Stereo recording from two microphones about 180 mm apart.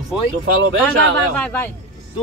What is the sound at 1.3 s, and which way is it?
Speech, 10° left (ahead or behind).